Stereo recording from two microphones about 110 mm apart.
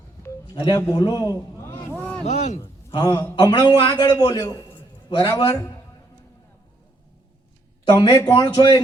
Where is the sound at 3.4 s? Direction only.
40° left (ahead or behind).